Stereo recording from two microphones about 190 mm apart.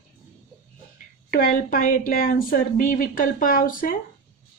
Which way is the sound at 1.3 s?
50° left (ahead or behind).